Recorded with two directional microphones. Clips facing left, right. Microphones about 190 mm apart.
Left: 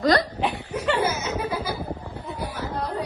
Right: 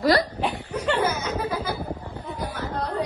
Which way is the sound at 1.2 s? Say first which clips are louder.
Even; 10° left (ahead or behind).